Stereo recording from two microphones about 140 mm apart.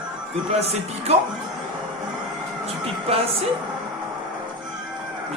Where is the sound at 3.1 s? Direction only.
45° right (ahead or behind).